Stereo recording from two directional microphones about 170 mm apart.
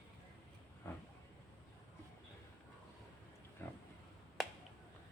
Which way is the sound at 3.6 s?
10° left (ahead or behind).